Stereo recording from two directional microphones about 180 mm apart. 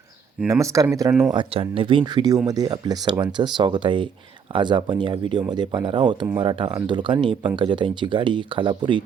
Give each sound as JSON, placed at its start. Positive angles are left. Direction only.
{"t": 0.4, "sound": "speech", "side_deg": -15}
{"t": 1.3, "sound": "speech", "side_deg": -30}